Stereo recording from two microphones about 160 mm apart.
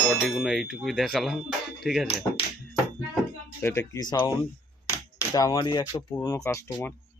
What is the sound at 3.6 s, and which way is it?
Speech, 15° left (ahead or behind).